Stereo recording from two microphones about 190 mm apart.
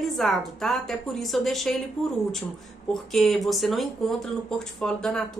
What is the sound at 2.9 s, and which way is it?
A woman's voice, centre (ahead or behind).